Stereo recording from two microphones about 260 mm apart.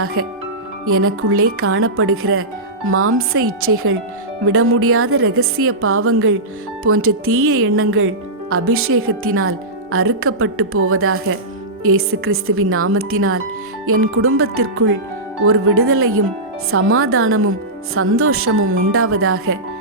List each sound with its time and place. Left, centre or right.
0.0 s a woman's voice: right